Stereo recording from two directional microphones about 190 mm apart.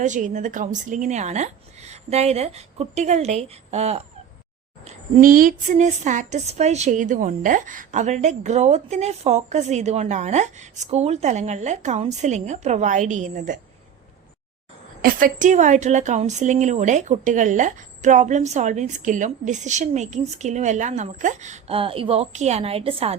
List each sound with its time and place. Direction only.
0.0 s a woman's voice: 40° right (ahead or behind)
15.0 s a woman's voice: 45° right (ahead or behind)